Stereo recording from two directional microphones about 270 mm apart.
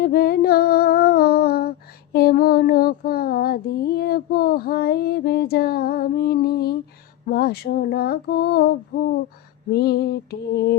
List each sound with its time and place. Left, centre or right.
0.0 s female singing: left
9.7 s female singing: left